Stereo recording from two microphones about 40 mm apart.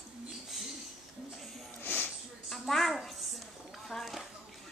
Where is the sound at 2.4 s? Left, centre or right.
Centre.